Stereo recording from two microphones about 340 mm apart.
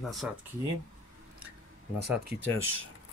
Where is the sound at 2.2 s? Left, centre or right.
Right.